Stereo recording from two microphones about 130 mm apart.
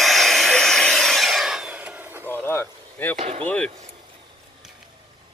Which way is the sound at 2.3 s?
15° left (ahead or behind).